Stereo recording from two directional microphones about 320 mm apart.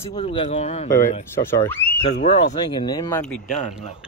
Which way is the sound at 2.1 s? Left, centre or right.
Left.